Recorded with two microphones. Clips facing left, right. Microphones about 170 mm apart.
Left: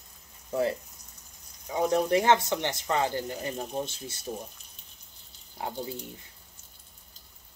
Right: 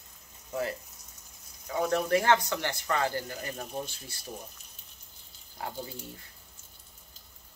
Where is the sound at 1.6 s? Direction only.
15° left (ahead or behind).